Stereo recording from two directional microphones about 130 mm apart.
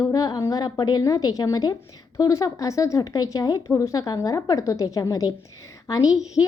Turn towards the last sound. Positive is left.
turn(degrees=25)  # may be behind; listen again after turning